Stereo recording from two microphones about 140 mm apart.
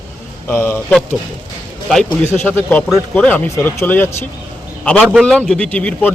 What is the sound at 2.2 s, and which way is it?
Speech, 15° left (ahead or behind).